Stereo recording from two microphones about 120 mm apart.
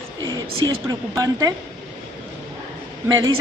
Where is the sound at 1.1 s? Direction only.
30° right (ahead or behind).